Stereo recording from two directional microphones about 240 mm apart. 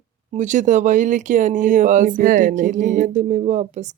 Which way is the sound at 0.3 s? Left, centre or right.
Right.